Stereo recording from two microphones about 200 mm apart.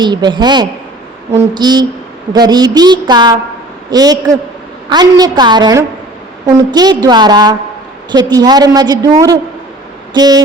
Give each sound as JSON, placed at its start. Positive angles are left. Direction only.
{"t": 0.0, "sound": "a woman's voice", "side_deg": -20}